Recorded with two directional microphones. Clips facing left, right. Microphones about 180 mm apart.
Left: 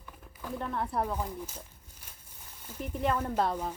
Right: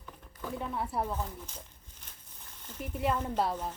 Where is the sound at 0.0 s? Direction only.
5° left (ahead or behind).